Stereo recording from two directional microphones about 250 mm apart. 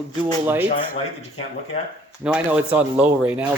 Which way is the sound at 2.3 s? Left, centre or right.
Centre.